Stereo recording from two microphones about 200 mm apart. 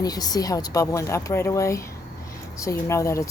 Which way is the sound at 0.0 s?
20° left (ahead or behind).